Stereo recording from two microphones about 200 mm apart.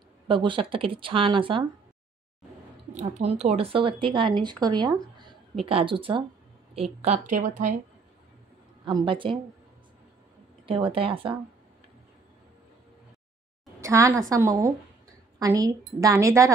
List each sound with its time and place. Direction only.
0.3 s speech: 25° right (ahead or behind)
2.9 s a woman's voice: 35° right (ahead or behind)
8.8 s speech: 25° right (ahead or behind)
10.7 s speech: 25° right (ahead or behind)
13.7 s a woman's voice: 15° right (ahead or behind)